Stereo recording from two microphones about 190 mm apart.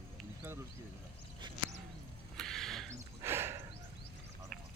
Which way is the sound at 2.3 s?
Centre (ahead or behind).